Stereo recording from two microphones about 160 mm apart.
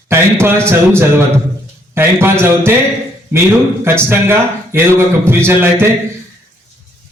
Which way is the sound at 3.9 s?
15° right (ahead or behind).